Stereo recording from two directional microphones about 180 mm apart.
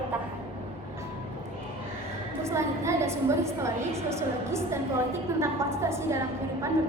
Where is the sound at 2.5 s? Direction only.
15° right (ahead or behind).